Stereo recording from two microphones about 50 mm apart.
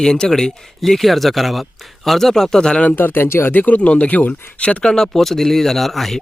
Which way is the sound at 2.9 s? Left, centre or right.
Left.